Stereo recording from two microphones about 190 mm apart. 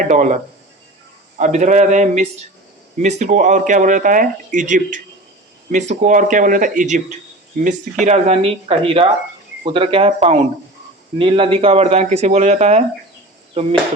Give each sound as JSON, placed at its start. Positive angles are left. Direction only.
{"t": 0.0, "sound": "speech", "side_deg": -40}
{"t": 1.4, "sound": "speech", "side_deg": -40}
{"t": 8.0, "sound": "speech", "side_deg": -35}